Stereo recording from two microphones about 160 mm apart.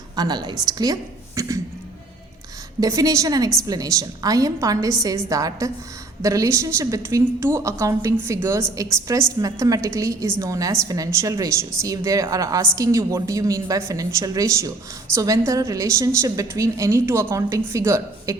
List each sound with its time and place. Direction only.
0.2 s a woman's voice: 25° right (ahead or behind)
2.8 s a woman's voice: 20° right (ahead or behind)